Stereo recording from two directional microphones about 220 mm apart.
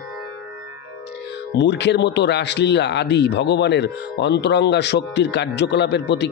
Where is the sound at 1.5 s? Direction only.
50° left (ahead or behind).